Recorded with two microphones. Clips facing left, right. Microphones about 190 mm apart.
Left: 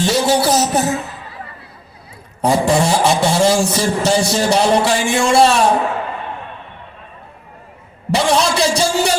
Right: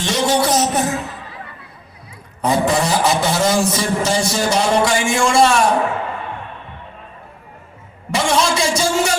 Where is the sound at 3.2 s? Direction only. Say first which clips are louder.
Left 3 dB; 30° left (ahead or behind).